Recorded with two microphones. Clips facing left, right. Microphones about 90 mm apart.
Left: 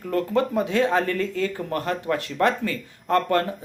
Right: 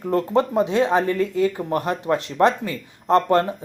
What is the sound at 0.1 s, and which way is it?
Speech, 25° right (ahead or behind).